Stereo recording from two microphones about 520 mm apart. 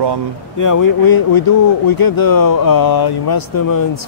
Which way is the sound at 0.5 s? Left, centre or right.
Left.